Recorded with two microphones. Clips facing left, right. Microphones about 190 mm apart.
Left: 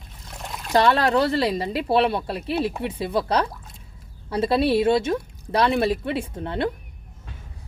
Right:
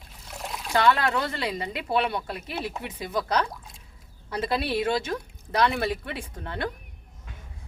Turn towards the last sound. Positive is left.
turn(degrees=25)  # may be behind; listen again after turning